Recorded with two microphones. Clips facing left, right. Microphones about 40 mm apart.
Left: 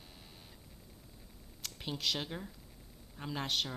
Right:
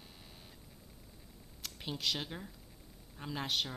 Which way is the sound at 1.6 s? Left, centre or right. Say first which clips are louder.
Left 1 dB; centre.